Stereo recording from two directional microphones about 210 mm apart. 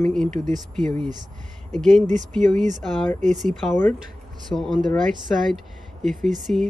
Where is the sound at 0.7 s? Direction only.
5° left (ahead or behind).